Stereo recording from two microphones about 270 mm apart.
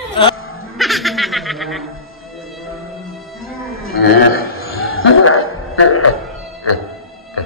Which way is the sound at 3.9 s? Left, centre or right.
Left.